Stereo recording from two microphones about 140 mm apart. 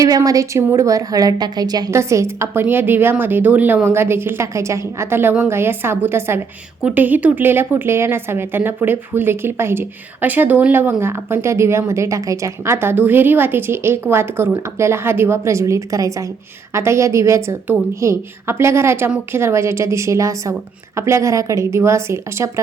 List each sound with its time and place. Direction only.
0.0 s a woman's voice: 25° right (ahead or behind)